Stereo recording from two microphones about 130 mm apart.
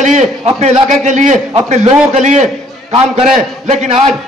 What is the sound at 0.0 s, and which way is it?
A man's voice, 65° right (ahead or behind).